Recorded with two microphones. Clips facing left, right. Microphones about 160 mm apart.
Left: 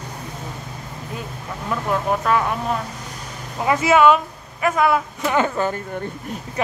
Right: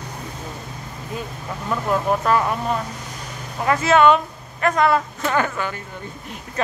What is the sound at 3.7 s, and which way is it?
Speech, 15° left (ahead or behind).